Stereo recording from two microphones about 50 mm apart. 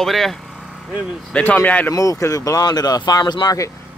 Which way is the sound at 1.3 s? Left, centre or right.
Left.